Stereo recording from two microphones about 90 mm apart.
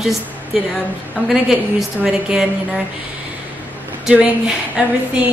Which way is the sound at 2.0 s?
10° right (ahead or behind).